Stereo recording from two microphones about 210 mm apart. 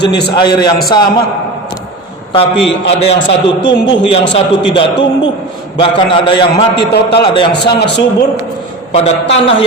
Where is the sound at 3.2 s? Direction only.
60° left (ahead or behind).